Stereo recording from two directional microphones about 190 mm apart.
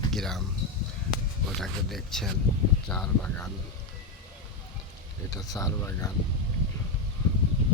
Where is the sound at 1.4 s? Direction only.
Centre (ahead or behind).